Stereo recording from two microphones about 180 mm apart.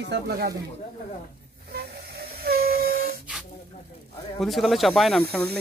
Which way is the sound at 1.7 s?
60° right (ahead or behind).